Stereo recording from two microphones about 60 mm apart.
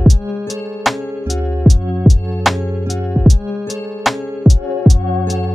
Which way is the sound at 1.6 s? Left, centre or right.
Centre.